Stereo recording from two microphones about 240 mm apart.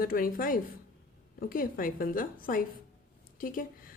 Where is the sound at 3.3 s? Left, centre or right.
Left.